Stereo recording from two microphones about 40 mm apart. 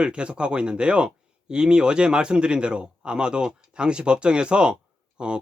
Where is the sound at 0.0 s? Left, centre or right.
Right.